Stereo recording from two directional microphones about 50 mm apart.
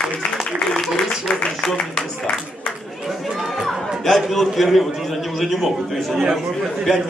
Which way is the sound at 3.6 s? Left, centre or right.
Centre.